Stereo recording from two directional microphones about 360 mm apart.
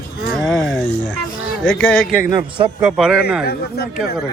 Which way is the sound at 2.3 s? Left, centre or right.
Centre.